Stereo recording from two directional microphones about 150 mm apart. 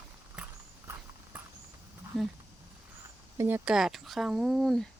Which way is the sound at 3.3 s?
15° right (ahead or behind).